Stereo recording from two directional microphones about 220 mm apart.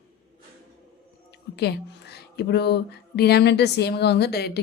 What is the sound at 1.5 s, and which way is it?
Speech, 50° left (ahead or behind).